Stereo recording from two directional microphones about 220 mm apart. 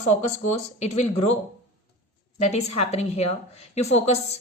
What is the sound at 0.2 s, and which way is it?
A woman's voice, 30° left (ahead or behind).